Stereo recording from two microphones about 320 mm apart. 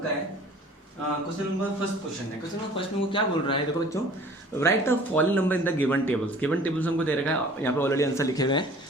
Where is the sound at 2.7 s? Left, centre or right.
Centre.